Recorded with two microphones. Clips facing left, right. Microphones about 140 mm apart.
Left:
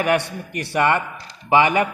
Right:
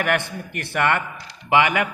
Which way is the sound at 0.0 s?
15° left (ahead or behind).